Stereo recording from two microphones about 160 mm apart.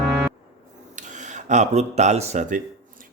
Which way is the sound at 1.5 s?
45° right (ahead or behind).